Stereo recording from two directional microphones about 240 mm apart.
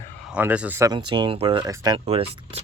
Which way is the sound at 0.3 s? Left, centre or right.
Centre.